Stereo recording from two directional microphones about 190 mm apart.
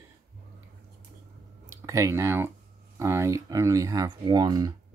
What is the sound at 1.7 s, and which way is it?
Speech, 15° right (ahead or behind).